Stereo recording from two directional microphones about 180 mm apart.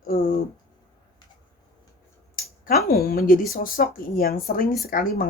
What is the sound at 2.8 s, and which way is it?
Speech, 55° left (ahead or behind).